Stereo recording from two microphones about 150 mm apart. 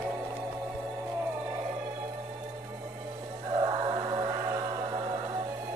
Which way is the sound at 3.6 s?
25° right (ahead or behind).